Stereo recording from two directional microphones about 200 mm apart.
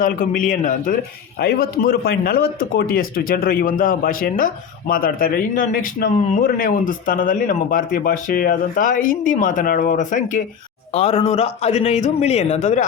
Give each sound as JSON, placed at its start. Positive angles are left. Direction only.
{"t": 0.0, "sound": "a man's voice", "side_deg": 45}